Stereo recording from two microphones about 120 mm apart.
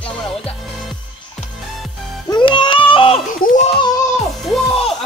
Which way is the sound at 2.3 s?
40° left (ahead or behind).